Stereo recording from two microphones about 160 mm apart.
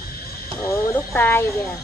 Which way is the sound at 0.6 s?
20° left (ahead or behind).